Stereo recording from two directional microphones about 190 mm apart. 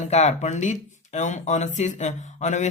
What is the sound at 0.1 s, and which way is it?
Speech, 35° left (ahead or behind).